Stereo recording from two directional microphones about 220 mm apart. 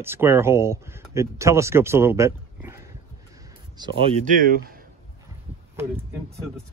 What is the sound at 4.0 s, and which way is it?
Speech, 25° right (ahead or behind).